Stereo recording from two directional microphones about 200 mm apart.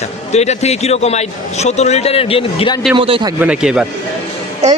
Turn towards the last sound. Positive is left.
turn(degrees=-35)  # may be behind; listen again after turning